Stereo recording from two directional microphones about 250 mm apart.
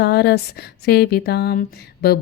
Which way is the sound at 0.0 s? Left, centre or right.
Left.